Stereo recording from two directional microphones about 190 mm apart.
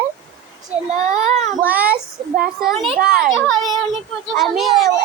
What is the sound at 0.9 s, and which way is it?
Speech, 40° right (ahead or behind).